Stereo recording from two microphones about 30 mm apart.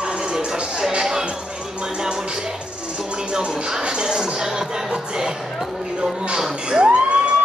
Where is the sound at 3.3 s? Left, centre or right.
Right.